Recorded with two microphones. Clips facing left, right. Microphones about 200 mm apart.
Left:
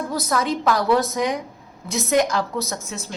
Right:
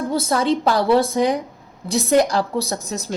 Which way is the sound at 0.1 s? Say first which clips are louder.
Right 5 dB; 30° right (ahead or behind).